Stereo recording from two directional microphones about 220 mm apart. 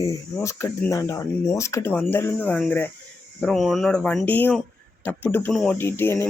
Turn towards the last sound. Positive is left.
turn(degrees=10)  # may be behind; listen again after turning